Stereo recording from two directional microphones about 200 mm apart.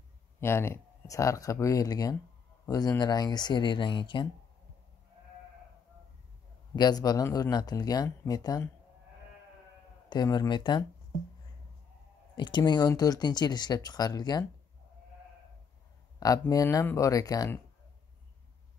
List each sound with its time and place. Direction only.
0.4 s speech: 10° left (ahead or behind)
6.7 s speech: 20° left (ahead or behind)
10.0 s speech: 20° left (ahead or behind)
12.4 s speech: 20° left (ahead or behind)
16.2 s speech: 20° left (ahead or behind)